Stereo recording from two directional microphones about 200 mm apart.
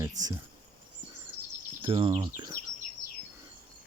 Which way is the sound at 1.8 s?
25° right (ahead or behind).